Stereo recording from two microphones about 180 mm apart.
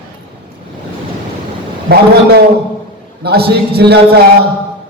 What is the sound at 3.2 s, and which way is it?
Speech, 60° right (ahead or behind).